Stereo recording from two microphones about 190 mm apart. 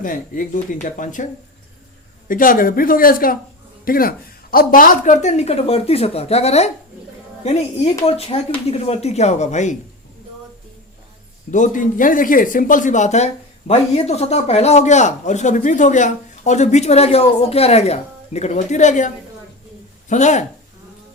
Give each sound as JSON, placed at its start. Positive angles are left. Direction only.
{"t": 0.0, "sound": "speech", "side_deg": 45}
{"t": 2.2, "sound": "speech", "side_deg": 45}
{"t": 11.5, "sound": "speech", "side_deg": 40}